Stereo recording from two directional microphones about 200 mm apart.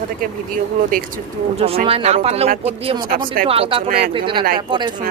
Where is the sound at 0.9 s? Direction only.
45° right (ahead or behind).